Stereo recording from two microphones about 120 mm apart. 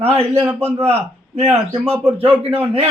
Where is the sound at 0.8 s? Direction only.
60° right (ahead or behind).